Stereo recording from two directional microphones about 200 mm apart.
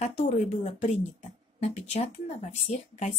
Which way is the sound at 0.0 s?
35° left (ahead or behind).